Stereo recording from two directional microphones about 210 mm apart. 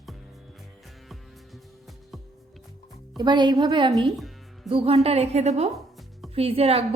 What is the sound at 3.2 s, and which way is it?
Speech, 20° right (ahead or behind).